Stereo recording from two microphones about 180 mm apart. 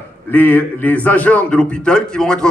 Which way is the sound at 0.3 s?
10° left (ahead or behind).